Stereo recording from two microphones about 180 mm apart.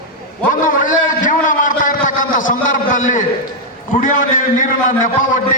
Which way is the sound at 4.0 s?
45° left (ahead or behind).